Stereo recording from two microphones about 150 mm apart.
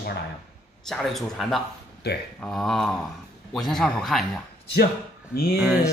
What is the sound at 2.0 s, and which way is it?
Speech, 90° left.